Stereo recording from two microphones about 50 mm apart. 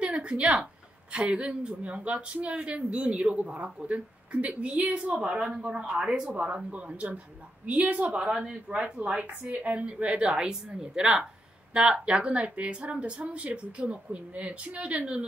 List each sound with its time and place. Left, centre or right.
0.0 s a sound: right
1.1 s a woman's voice: right
6.0 s speech: centre
6.3 s a woman's voice: right